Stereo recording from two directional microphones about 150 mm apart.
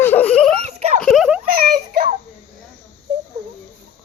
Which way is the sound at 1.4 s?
70° right (ahead or behind).